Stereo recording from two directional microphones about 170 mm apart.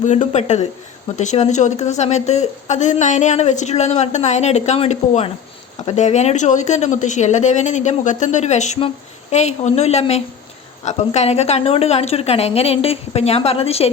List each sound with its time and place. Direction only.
0.0 s a woman's voice: 45° left (ahead or behind)